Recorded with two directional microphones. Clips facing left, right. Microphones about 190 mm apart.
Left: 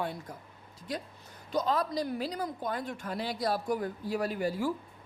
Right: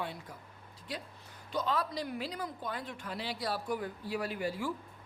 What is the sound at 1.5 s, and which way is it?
Speech, 40° left (ahead or behind).